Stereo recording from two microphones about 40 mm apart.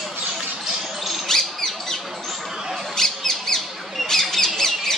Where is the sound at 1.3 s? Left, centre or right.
Centre.